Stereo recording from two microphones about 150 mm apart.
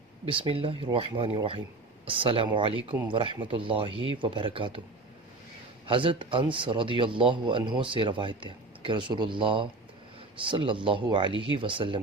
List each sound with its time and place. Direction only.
0.3 s speech: 35° right (ahead or behind)
5.8 s speech: 35° right (ahead or behind)